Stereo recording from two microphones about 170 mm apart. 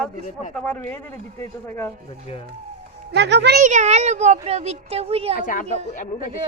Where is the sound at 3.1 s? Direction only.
85° right.